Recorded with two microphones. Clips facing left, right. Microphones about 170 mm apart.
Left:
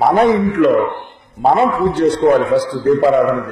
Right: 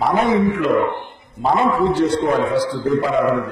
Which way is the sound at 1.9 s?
65° left (ahead or behind).